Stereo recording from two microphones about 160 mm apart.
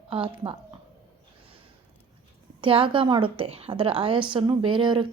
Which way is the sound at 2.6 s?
35° right (ahead or behind).